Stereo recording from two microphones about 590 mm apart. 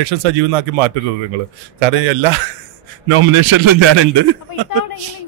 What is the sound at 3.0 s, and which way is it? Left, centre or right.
Speech, right.